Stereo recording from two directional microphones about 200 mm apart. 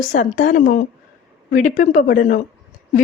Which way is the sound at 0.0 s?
40° left (ahead or behind).